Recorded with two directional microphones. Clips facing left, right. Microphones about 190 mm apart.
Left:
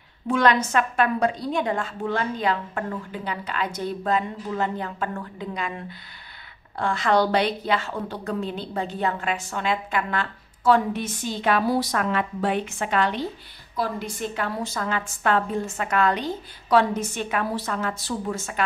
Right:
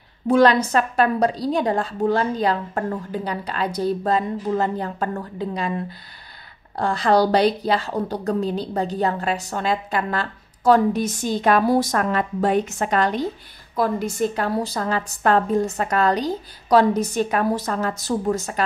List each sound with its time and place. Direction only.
0.3 s a woman's voice: 35° right (ahead or behind)